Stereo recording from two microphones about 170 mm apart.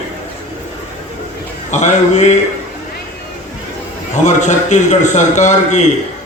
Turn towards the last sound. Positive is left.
turn(degrees=45)  # may be behind; listen again after turning